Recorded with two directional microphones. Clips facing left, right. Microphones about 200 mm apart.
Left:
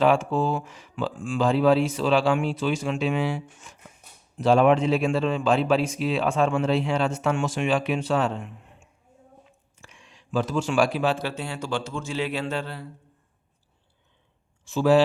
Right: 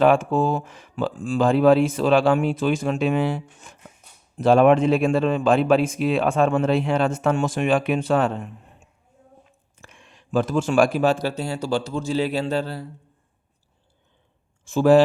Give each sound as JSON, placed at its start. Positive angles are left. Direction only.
{"t": 0.0, "sound": "speech", "side_deg": -55}
{"t": 3.2, "sound": "speech", "side_deg": -55}
{"t": 8.4, "sound": "a sound", "side_deg": -40}
{"t": 9.7, "sound": "speech", "side_deg": -55}
{"t": 14.6, "sound": "speech", "side_deg": -50}